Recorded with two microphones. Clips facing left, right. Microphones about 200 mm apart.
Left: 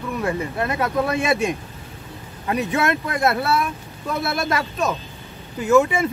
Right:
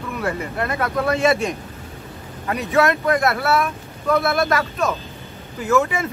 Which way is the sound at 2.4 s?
25° left (ahead or behind).